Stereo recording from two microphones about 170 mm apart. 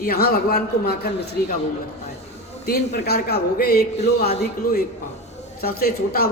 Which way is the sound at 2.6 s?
70° left (ahead or behind).